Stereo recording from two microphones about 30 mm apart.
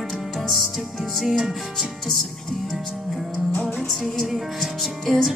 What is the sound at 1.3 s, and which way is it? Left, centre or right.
Music, centre.